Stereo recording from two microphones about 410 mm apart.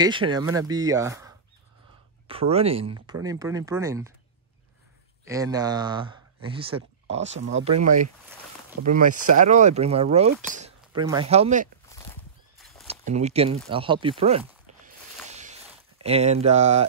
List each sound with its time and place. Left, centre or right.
0.0 s speech: centre
5.2 s speech: centre
12.5 s horse: centre
13.0 s speech: centre
15.2 s a sound: centre